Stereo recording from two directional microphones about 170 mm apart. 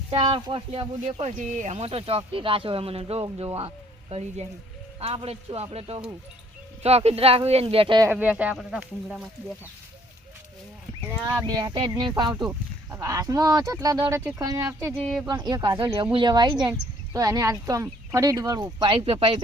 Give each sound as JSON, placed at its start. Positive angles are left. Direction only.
{"t": 0.1, "sound": "speech", "side_deg": -35}
{"t": 4.9, "sound": "speech", "side_deg": -35}
{"t": 8.0, "sound": "speech", "side_deg": -10}
{"t": 11.1, "sound": "speech", "side_deg": -20}
{"t": 12.4, "sound": "speech", "side_deg": -15}